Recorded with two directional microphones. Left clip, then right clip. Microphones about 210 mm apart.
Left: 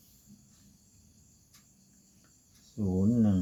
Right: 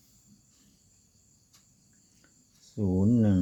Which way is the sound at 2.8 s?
50° right (ahead or behind).